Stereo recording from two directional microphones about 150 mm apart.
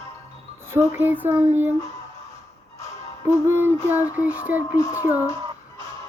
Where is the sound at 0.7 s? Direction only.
15° right (ahead or behind).